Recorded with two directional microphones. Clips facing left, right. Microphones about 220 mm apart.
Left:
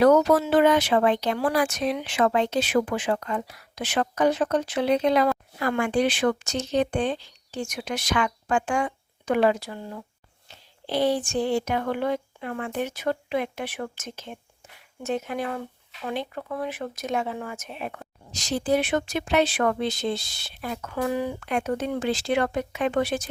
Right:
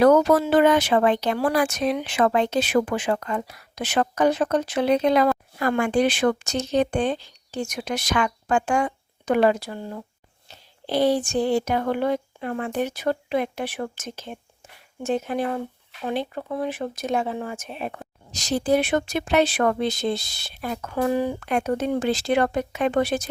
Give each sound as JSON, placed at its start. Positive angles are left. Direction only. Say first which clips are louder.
{"t": 0.0, "sound": "speech", "louder": "right 2 dB", "side_deg": -50}